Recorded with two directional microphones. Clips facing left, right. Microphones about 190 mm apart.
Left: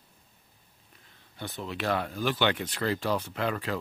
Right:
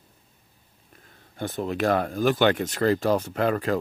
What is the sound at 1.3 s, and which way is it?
Speech, 50° right (ahead or behind).